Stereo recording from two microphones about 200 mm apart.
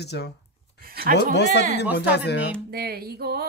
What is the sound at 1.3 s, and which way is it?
Speech, 60° left (ahead or behind).